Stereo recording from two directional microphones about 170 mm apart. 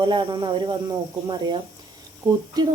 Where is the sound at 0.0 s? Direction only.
25° right (ahead or behind).